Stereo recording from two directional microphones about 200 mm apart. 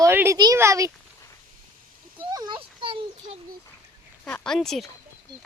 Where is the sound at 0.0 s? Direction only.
10° right (ahead or behind).